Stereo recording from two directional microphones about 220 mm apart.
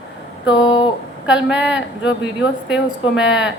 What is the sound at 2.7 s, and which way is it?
Speech, 55° left (ahead or behind).